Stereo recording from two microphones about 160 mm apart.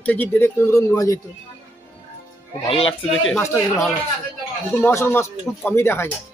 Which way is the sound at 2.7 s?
35° left (ahead or behind).